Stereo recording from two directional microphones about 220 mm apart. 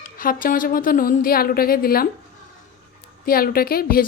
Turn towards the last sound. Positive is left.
turn(degrees=40)  # may be behind; listen again after turning